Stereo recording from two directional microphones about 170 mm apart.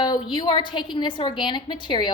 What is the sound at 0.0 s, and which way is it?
A woman's voice, 25° left (ahead or behind).